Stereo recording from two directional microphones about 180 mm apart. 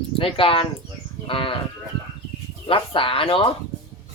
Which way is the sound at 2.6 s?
30° left (ahead or behind).